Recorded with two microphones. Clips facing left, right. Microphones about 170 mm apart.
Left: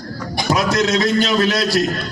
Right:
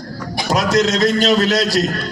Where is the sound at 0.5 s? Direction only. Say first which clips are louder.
Right 1 dB; 40° right (ahead or behind).